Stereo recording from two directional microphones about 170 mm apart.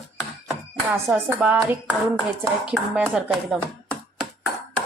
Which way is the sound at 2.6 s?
5° right (ahead or behind).